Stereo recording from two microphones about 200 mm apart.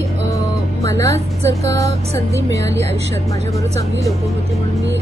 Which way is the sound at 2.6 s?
65° right (ahead or behind).